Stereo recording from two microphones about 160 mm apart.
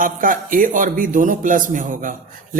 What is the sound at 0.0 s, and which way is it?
Speech, 60° right (ahead or behind).